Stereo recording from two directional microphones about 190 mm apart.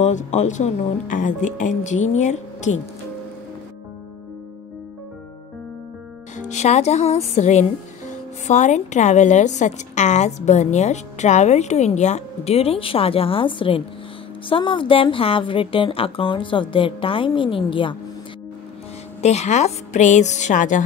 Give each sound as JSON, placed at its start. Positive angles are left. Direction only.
{"t": 0.0, "sound": "a woman's voice", "side_deg": 40}
{"t": 6.3, "sound": "music", "side_deg": 35}
{"t": 8.5, "sound": "a woman's voice", "side_deg": 40}
{"t": 19.2, "sound": "a woman's voice", "side_deg": 35}